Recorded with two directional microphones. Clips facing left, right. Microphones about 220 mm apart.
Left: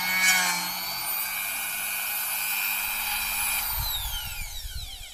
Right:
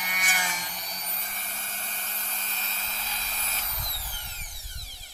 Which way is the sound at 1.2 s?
45° right (ahead or behind).